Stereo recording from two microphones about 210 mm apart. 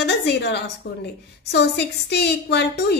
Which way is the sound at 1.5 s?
55° left (ahead or behind).